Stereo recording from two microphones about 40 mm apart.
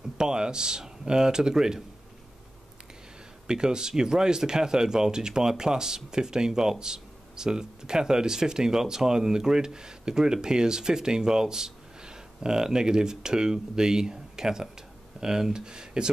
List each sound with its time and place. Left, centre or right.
0.2 s speech: centre
3.4 s speech: centre